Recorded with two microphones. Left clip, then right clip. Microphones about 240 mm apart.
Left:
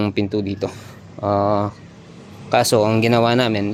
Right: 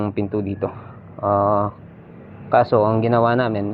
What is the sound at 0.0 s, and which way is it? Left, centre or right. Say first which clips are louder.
Speech: left 2 dB; left.